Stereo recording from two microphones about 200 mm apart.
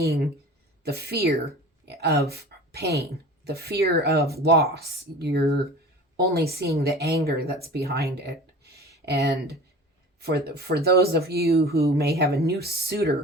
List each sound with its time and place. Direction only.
0.9 s a woman's voice: 55° right (ahead or behind)